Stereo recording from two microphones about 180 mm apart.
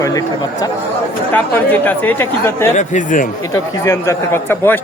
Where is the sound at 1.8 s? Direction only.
10° left (ahead or behind).